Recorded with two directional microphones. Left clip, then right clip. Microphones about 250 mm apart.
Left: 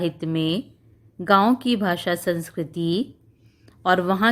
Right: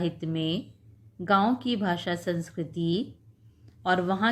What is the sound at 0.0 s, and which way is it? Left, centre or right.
A woman's voice, left.